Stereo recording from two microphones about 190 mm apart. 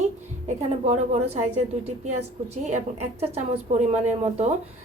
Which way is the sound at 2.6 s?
35° right (ahead or behind).